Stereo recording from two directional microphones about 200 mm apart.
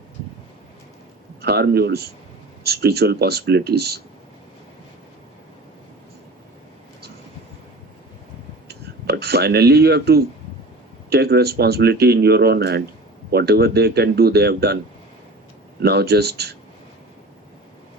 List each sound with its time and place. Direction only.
1.4 s speech: 55° right (ahead or behind)
8.6 s speech: 55° right (ahead or behind)
15.8 s speech: 55° right (ahead or behind)